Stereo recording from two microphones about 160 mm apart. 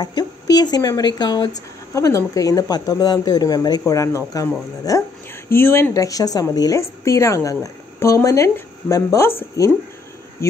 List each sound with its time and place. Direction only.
0.0 s speech: 25° left (ahead or behind)